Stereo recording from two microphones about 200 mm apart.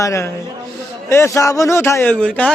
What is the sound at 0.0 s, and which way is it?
A man's voice, 15° left (ahead or behind).